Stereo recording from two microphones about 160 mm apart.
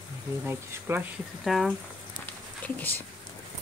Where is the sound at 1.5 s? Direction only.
Centre (ahead or behind).